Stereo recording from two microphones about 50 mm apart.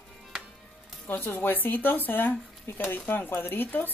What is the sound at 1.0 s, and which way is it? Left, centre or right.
A woman's voice, left.